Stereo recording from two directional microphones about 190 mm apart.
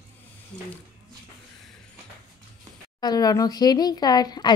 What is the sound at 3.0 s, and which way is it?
Speech, 20° left (ahead or behind).